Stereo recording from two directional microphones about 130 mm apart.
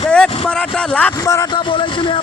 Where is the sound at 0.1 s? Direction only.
5° left (ahead or behind).